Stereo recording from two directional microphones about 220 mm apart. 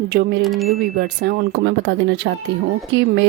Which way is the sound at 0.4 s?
Centre (ahead or behind).